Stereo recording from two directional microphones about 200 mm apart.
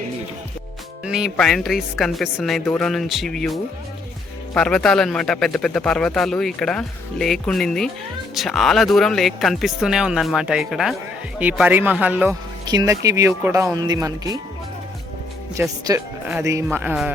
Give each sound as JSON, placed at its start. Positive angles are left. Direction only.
{"t": 1.0, "sound": "a man's voice", "side_deg": 0}
{"t": 12.6, "sound": "a man's voice", "side_deg": -20}
{"t": 15.8, "sound": "a man's voice", "side_deg": -15}